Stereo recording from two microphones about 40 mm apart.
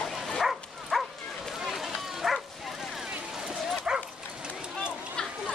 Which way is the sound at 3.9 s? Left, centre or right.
Right.